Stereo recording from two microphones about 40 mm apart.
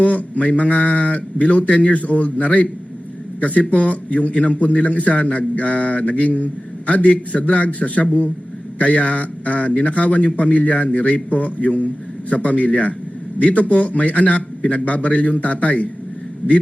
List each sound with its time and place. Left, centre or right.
0.0 s a man's voice: left